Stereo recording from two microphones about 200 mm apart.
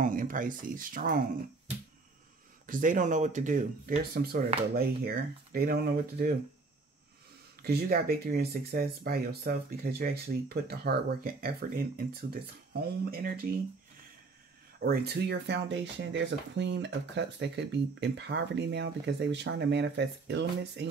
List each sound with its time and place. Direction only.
0.0 s speech: 40° right (ahead or behind)
2.6 s speech: 40° right (ahead or behind)
7.6 s speech: 50° right (ahead or behind)
14.8 s speech: 55° right (ahead or behind)